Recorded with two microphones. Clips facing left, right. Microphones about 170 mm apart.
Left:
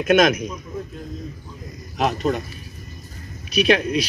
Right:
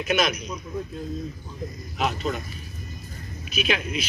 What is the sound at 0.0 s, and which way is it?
Speech, 50° left (ahead or behind).